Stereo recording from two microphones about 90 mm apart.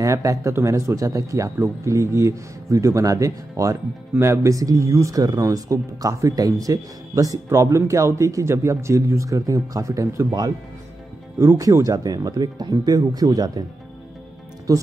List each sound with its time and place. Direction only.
0.0 s speech: 35° right (ahead or behind)
14.7 s speech: 40° right (ahead or behind)